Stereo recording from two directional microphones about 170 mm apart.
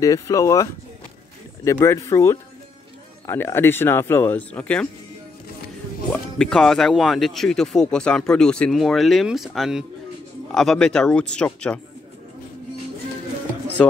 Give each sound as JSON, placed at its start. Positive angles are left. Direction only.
{"t": 0.0, "sound": "speech", "side_deg": 20}
{"t": 6.3, "sound": "speech", "side_deg": 5}
{"t": 13.8, "sound": "speech", "side_deg": 5}